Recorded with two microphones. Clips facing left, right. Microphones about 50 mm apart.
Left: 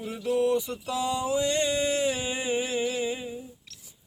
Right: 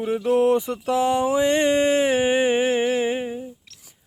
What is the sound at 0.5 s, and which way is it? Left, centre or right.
Speech, right.